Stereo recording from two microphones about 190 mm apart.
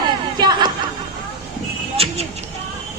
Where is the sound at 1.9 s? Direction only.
30° right (ahead or behind).